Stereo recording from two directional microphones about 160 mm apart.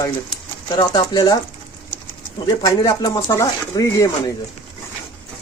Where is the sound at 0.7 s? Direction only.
30° left (ahead or behind).